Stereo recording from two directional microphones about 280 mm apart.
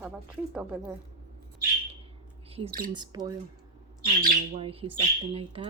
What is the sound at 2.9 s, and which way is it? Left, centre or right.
Speech, centre.